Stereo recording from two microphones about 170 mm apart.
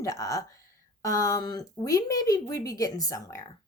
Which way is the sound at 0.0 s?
20° left (ahead or behind).